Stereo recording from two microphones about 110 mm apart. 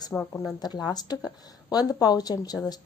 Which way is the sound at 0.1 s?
10° left (ahead or behind).